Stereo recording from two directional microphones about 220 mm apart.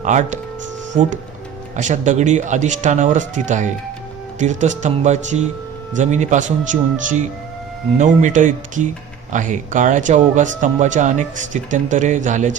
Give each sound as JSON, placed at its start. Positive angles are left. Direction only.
{"t": 0.0, "sound": "speech", "side_deg": -35}
{"t": 1.7, "sound": "speech", "side_deg": -35}